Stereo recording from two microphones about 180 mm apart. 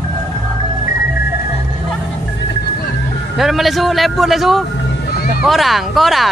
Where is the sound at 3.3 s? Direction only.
Centre (ahead or behind).